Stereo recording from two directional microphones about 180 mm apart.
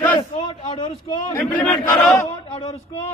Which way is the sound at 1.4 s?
10° left (ahead or behind).